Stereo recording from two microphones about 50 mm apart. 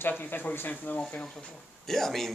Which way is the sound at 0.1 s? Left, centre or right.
Left.